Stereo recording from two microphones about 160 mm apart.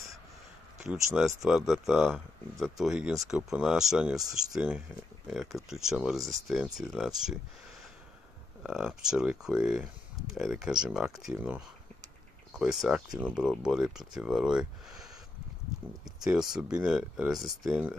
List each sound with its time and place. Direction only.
1.1 s speech: centre (ahead or behind)
8.6 s speech: 5° right (ahead or behind)
16.3 s speech: 5° right (ahead or behind)